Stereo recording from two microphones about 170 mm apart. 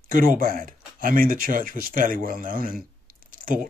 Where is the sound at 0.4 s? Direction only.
55° right (ahead or behind).